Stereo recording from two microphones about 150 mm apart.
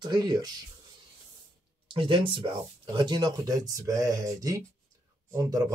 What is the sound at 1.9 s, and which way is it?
Speech, 35° right (ahead or behind).